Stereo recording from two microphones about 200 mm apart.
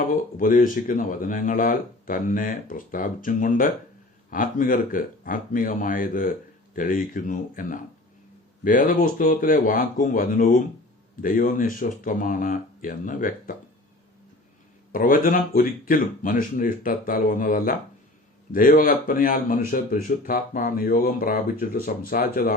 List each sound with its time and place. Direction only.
0.0 s speech: 40° left (ahead or behind)
14.9 s speech: 45° left (ahead or behind)